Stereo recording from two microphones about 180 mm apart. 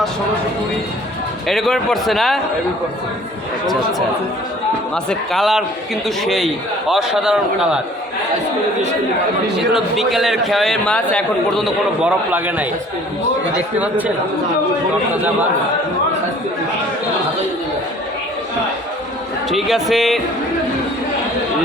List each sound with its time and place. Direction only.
1.5 s a man's voice: centre (ahead or behind)
5.0 s a man's voice: centre (ahead or behind)
9.7 s a man's voice: centre (ahead or behind)
19.5 s a man's voice: centre (ahead or behind)